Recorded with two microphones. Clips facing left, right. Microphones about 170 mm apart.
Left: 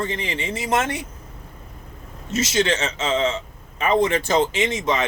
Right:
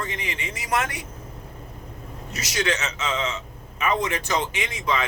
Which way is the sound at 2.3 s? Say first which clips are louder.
Left 6 dB; 25° left (ahead or behind).